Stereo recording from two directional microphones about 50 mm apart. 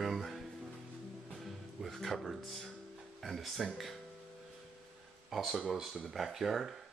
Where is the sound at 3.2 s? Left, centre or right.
Centre.